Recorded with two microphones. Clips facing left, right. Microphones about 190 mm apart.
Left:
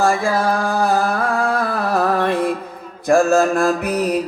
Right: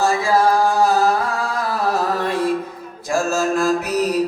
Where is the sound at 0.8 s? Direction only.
55° left (ahead or behind).